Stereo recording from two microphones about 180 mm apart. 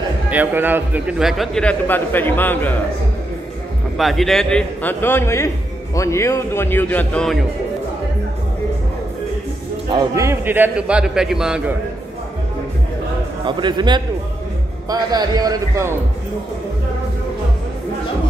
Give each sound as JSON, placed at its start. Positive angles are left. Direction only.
{"t": 0.3, "sound": "a man's voice", "side_deg": -10}
{"t": 4.0, "sound": "a man's voice", "side_deg": 0}
{"t": 9.8, "sound": "a man's voice", "side_deg": -20}
{"t": 13.5, "sound": "a man's voice", "side_deg": -25}